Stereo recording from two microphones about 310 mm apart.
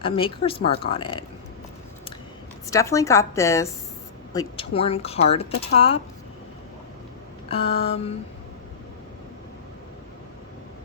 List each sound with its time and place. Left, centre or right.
0.0 s a woman's voice: centre
2.6 s a woman's voice: centre
7.4 s speech: centre